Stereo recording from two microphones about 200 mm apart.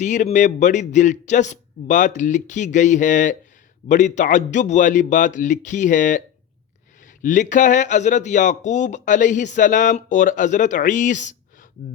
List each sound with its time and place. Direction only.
0.0 s a man's voice: 35° left (ahead or behind)